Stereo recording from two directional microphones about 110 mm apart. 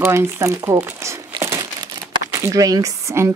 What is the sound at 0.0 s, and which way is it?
Speech, 20° right (ahead or behind).